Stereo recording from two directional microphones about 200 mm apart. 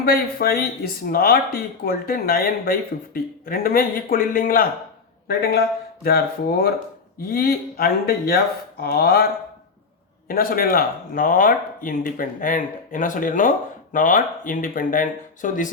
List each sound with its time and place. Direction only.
0.0 s speech: 45° left (ahead or behind)
10.2 s speech: 45° left (ahead or behind)